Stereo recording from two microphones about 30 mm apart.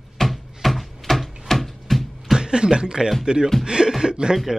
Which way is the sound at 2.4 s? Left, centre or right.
Right.